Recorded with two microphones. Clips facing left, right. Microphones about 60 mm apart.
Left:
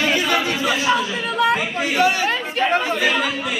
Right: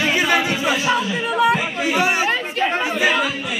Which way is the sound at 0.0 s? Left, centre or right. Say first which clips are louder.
Right 1 dB; centre.